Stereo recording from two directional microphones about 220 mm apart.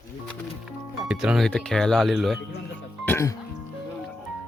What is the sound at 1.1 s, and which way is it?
Speech, 5° right (ahead or behind).